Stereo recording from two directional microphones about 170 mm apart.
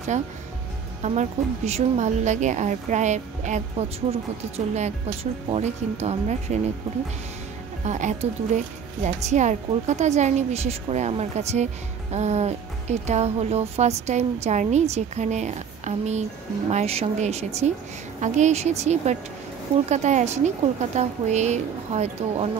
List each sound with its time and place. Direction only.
1.0 s a woman's voice: 45° right (ahead or behind)
7.8 s a woman's voice: 45° right (ahead or behind)